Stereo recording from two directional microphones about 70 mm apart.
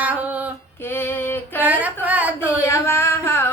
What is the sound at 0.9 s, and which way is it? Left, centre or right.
Female singing, left.